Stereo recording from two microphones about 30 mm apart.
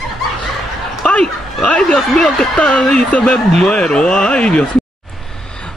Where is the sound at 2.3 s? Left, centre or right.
Left.